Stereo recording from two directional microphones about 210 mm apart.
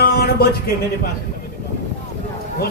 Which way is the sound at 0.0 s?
45° left (ahead or behind).